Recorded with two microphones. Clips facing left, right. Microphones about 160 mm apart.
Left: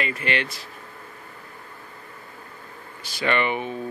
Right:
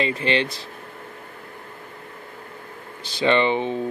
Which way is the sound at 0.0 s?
30° right (ahead or behind).